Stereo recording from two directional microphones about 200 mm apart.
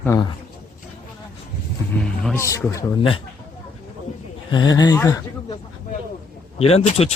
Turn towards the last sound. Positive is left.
turn(degrees=30)  # may be behind; listen again after turning